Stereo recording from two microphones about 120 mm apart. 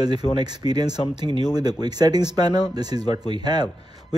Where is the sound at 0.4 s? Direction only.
35° right (ahead or behind).